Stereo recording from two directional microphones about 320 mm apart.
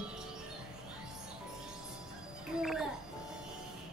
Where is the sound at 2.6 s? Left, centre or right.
Centre.